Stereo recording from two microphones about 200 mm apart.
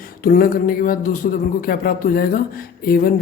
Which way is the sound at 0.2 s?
45° left (ahead or behind).